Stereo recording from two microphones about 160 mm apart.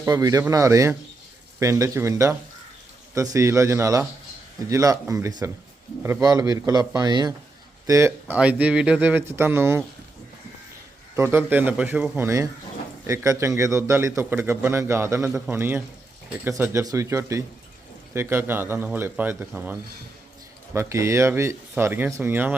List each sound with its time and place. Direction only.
0.0 s a man's voice: 20° right (ahead or behind)
11.1 s a man's voice: 15° right (ahead or behind)